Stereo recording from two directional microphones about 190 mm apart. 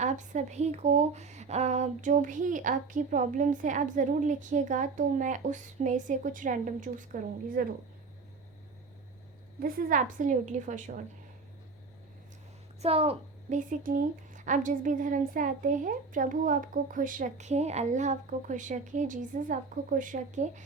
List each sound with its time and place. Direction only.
0.0 s speech: 40° right (ahead or behind)
9.6 s speech: 45° right (ahead or behind)
12.8 s a child's voice: 30° right (ahead or behind)